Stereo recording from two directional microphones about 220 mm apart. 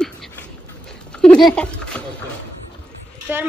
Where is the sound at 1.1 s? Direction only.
5° left (ahead or behind).